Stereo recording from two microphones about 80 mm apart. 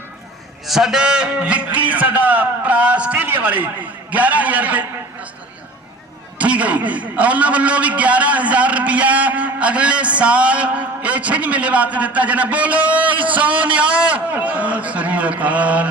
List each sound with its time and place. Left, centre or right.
0.7 s a man's voice: centre
6.4 s a man's voice: centre